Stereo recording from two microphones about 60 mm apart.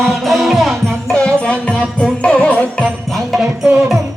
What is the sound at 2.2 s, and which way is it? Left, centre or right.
Music, centre.